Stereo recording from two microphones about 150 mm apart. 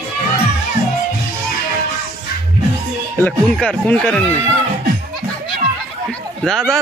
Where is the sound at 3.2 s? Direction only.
5° left (ahead or behind).